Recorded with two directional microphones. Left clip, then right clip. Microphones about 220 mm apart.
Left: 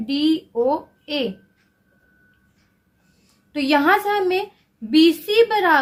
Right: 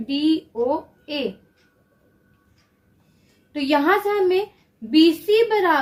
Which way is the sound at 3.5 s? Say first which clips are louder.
Left 2 dB; 35° left (ahead or behind).